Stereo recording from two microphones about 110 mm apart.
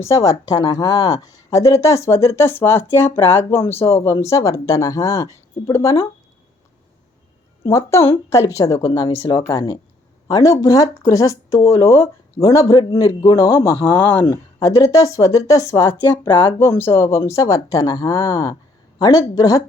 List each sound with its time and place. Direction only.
0.1 s a woman's voice: 30° left (ahead or behind)
7.6 s a woman's voice: 25° left (ahead or behind)
13.7 s speech: 20° left (ahead or behind)
14.3 s speech: 30° left (ahead or behind)
16.6 s speech: 20° left (ahead or behind)